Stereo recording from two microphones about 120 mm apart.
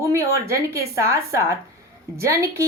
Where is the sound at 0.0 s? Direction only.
25° right (ahead or behind).